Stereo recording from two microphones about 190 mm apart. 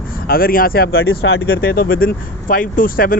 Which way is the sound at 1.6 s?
50° left (ahead or behind).